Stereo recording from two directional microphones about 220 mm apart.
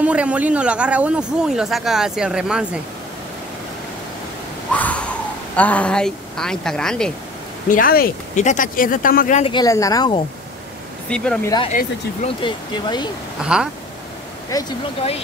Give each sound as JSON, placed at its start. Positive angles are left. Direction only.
{"t": 0.0, "sound": "a man's voice", "side_deg": -5}
{"t": 4.7, "sound": "a sound", "side_deg": 5}
{"t": 5.6, "sound": "a man's voice", "side_deg": 5}
{"t": 7.6, "sound": "speech", "side_deg": 40}
{"t": 9.4, "sound": "speech", "side_deg": 20}
{"t": 11.1, "sound": "a man's voice", "side_deg": 5}
{"t": 12.4, "sound": "speech", "side_deg": 20}
{"t": 13.4, "sound": "a man's voice", "side_deg": -5}
{"t": 14.5, "sound": "speech", "side_deg": 15}